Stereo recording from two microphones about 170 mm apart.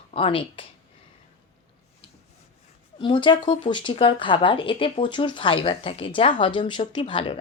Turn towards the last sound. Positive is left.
turn(degrees=30)  # may be behind; listen again after turning